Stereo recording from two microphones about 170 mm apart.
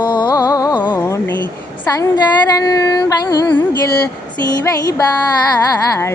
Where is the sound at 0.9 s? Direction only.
10° left (ahead or behind).